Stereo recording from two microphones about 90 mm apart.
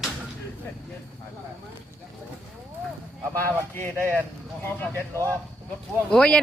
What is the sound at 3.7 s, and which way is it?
Speech, 20° left (ahead or behind).